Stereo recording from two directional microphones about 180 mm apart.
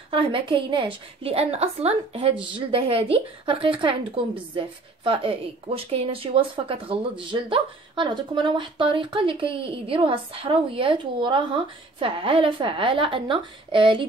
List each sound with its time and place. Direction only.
0.1 s a woman's voice: 30° right (ahead or behind)